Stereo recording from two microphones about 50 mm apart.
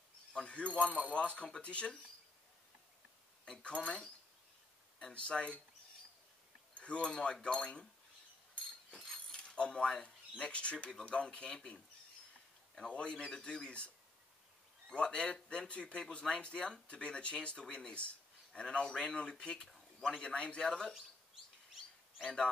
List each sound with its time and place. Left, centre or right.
0.3 s speech: left
3.4 s speech: left
6.7 s speech: left
8.9 s speech: centre
12.9 s speech: left
22.2 s speech: centre